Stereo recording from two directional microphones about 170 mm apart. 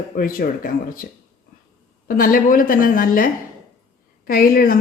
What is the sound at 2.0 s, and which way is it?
A woman's voice, 55° left (ahead or behind).